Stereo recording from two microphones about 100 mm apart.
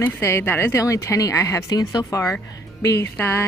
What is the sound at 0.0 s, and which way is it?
Speech, 25° left (ahead or behind).